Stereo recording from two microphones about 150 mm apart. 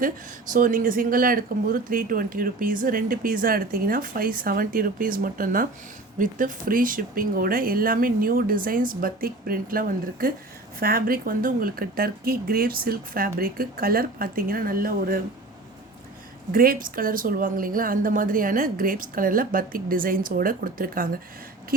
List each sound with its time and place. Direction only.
0.5 s speech: 65° right (ahead or behind)
16.5 s speech: 70° right (ahead or behind)